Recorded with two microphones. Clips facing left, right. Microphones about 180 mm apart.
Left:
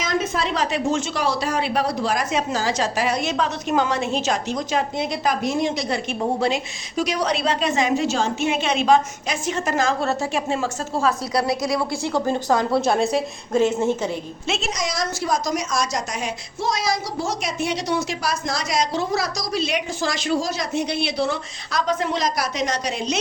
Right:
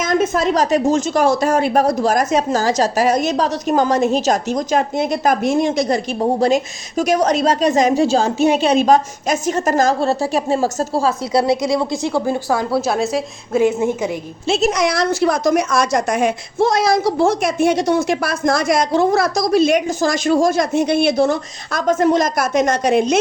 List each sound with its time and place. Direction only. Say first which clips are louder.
0.0 s a woman's voice: right 7 dB; 50° right (ahead or behind); by 14.1 s 10° right (ahead or behind)
14.4 s a woman's voice: right 11 dB; 35° right (ahead or behind)
14.7 s speech: right 9 dB; 60° right (ahead or behind)